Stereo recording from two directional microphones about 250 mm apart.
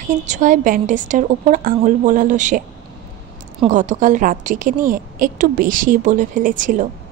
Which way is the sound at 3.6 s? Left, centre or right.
Right.